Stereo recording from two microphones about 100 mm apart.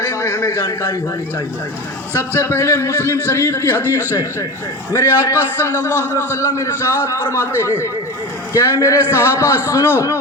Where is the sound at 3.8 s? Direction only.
20° right (ahead or behind).